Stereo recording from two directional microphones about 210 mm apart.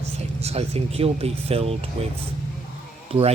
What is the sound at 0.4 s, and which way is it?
Speech, 30° right (ahead or behind).